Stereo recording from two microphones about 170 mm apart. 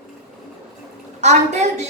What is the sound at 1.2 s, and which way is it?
Speech, 45° right (ahead or behind).